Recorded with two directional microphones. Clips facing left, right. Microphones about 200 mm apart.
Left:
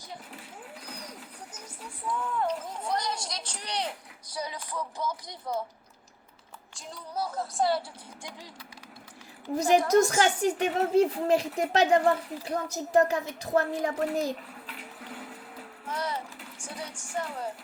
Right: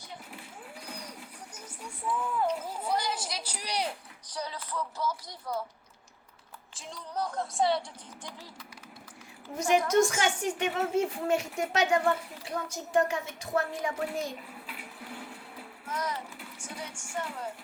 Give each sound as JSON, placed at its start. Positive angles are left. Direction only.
{"t": 1.5, "sound": "a sound", "side_deg": 0}
{"t": 4.3, "sound": "speech", "side_deg": 10}
{"t": 6.7, "sound": "speech", "side_deg": 0}
{"t": 9.6, "sound": "a woman's voice", "side_deg": 35}
{"t": 15.9, "sound": "a sound", "side_deg": 30}
{"t": 16.6, "sound": "music", "side_deg": 35}